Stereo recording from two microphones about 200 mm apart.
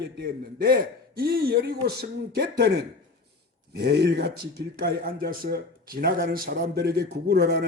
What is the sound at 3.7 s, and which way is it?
Speech, 55° right (ahead or behind).